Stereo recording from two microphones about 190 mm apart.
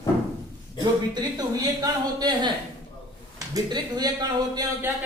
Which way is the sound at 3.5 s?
20° right (ahead or behind).